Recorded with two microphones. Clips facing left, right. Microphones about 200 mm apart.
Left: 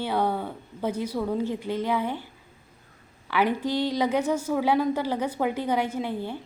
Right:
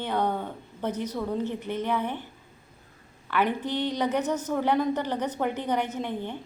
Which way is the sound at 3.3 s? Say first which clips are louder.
Left 2 dB; 10° left (ahead or behind).